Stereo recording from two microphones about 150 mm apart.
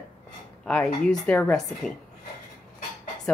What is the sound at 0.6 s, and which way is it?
Speech, 5° left (ahead or behind).